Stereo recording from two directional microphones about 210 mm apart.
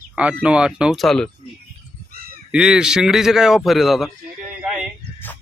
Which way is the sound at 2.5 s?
5° right (ahead or behind).